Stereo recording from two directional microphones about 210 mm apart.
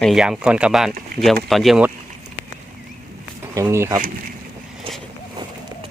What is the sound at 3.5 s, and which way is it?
Speech, 15° right (ahead or behind).